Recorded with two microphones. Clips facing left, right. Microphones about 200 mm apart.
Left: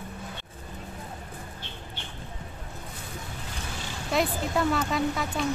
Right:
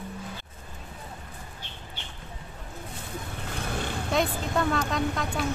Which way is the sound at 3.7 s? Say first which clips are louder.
Right 6 dB; 55° right (ahead or behind).